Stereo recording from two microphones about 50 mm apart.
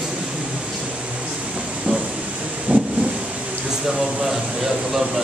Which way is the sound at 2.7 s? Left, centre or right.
Right.